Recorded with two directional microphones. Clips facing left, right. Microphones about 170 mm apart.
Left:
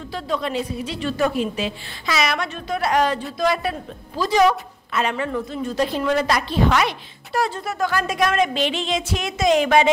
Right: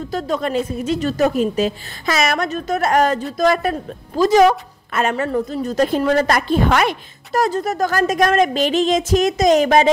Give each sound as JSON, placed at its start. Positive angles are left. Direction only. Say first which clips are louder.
{"t": 0.1, "sound": "a woman's voice", "louder": "right 4 dB", "side_deg": -45}